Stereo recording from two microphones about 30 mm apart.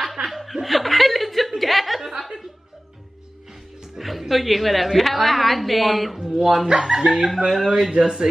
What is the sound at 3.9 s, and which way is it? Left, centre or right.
Music, centre.